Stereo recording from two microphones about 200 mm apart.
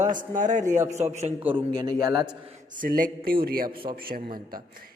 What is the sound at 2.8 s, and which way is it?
Speech, 45° right (ahead or behind).